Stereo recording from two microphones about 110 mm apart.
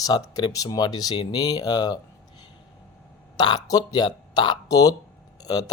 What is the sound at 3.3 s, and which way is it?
Speech, 40° left (ahead or behind).